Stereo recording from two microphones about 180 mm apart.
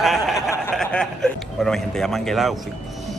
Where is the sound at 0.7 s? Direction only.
5° left (ahead or behind).